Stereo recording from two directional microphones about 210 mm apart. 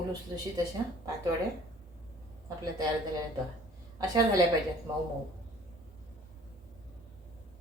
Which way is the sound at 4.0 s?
15° right (ahead or behind).